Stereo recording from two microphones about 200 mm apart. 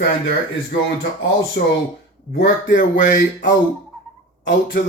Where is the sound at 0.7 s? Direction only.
50° left (ahead or behind).